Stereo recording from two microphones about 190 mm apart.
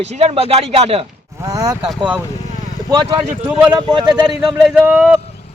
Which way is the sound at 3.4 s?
5° right (ahead or behind).